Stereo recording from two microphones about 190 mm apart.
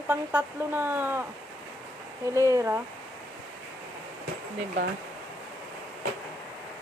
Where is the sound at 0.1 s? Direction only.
10° right (ahead or behind).